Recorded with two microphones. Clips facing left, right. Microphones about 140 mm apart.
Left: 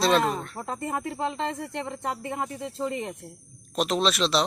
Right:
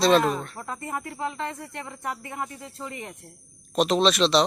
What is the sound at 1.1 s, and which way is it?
Speech, 30° left (ahead or behind).